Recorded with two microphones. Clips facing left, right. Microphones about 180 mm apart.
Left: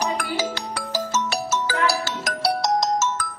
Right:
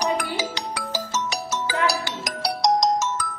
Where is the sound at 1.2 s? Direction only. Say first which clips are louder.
Left 3 dB; 15° right (ahead or behind).